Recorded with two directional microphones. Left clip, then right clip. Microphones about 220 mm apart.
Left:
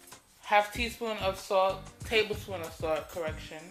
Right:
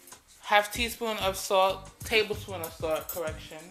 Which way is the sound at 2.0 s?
10° right (ahead or behind).